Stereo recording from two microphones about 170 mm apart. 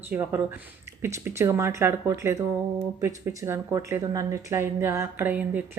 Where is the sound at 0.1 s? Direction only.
10° right (ahead or behind).